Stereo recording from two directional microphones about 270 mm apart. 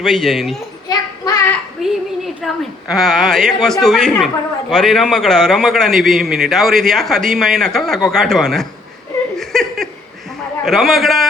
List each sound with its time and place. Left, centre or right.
0.0 s speech: centre
0.9 s child singing: centre
1.8 s a woman's voice: centre
9.4 s a sound: centre
10.7 s speech: centre